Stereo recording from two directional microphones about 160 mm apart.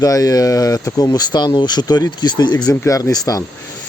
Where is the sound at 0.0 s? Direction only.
20° left (ahead or behind).